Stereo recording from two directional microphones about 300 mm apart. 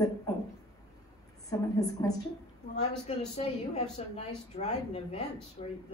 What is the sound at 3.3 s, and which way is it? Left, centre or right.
A woman's voice, left.